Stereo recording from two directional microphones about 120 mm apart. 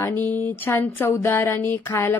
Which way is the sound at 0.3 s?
15° left (ahead or behind).